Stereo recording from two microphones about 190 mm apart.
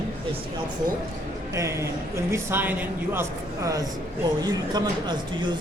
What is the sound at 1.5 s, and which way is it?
A man's voice, 15° right (ahead or behind).